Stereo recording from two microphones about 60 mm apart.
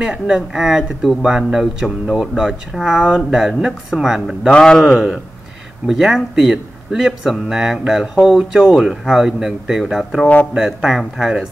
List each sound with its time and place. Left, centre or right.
0.0 s speech: centre
4.5 s speech: centre
4.8 s speech: centre
10.2 s a man's voice: left
10.5 s speech: centre